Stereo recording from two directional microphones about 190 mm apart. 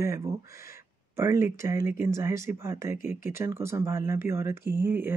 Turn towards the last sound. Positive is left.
turn(degrees=-10)  # may be behind; listen again after turning